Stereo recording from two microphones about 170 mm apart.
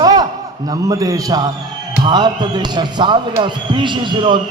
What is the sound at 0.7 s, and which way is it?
Speech, 20° right (ahead or behind).